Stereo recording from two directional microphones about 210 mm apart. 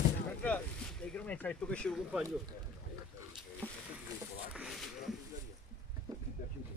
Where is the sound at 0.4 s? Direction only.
5° left (ahead or behind).